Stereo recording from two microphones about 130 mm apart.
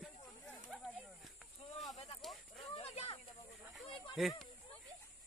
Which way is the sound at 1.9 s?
55° left (ahead or behind).